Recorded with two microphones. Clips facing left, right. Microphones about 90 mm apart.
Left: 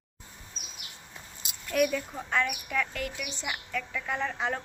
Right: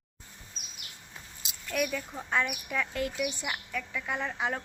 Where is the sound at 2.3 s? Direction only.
20° right (ahead or behind).